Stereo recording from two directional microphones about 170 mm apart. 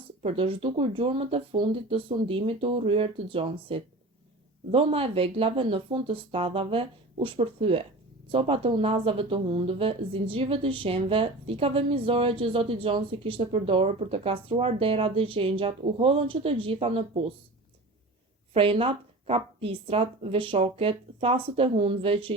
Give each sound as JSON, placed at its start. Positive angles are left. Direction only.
{"t": 0.2, "sound": "speech", "side_deg": -35}
{"t": 18.5, "sound": "speech", "side_deg": -35}